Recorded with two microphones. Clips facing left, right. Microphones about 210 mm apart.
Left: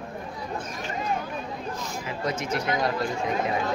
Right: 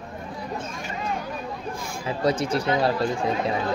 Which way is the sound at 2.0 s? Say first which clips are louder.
Right 8 dB; 35° right (ahead or behind).